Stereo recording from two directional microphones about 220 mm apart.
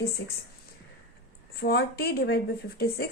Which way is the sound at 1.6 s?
45° left (ahead or behind).